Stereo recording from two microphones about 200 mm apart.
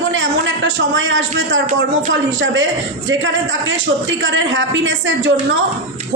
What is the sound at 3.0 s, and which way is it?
A man's voice, 65° right (ahead or behind).